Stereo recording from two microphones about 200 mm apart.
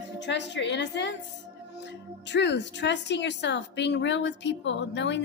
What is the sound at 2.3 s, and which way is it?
A woman's voice, 60° left (ahead or behind).